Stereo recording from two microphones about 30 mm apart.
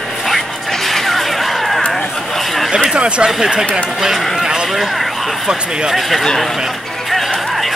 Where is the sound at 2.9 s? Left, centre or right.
Right.